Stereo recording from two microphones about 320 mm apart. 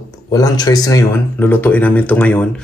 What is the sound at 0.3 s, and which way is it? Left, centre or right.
A man's voice, centre.